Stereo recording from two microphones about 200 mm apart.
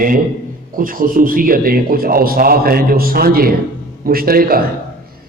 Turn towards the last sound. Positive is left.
turn(degrees=-45)  # may be behind; listen again after turning